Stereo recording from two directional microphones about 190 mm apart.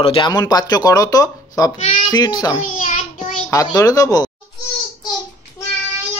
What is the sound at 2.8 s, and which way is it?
Child singing, 40° left (ahead or behind).